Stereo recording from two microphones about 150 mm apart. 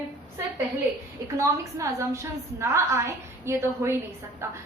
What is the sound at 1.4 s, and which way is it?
A woman's voice, 20° right (ahead or behind).